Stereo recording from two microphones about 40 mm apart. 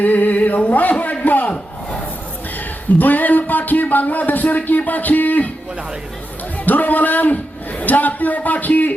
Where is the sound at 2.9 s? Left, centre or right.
Left.